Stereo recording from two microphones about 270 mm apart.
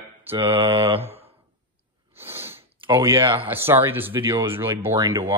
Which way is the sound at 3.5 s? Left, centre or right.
Centre.